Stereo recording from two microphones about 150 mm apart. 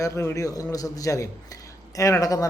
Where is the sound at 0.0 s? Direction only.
20° left (ahead or behind).